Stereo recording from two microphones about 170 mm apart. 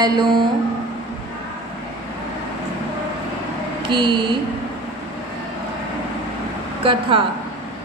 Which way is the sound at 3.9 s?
30° right (ahead or behind).